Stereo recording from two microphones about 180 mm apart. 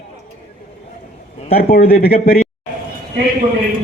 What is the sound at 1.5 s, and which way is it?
Speech, 60° left (ahead or behind).